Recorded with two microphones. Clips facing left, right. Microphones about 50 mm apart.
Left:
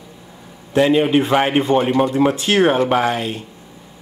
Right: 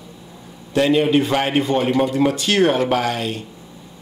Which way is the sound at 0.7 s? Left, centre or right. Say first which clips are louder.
Left 2 dB; centre.